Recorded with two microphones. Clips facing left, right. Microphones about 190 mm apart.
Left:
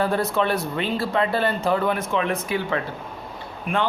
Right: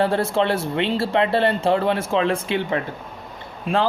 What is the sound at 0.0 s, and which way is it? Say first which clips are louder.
Speech: right 2 dB; 30° right (ahead or behind).